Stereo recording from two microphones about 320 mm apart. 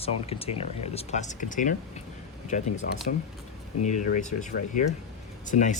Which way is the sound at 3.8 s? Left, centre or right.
Left.